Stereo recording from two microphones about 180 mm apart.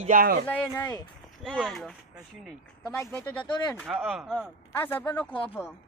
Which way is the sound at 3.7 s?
10° right (ahead or behind).